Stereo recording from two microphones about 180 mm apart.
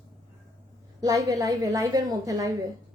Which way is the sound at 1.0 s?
20° right (ahead or behind).